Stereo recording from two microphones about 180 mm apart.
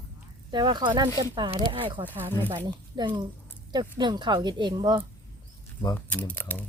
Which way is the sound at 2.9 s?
25° right (ahead or behind).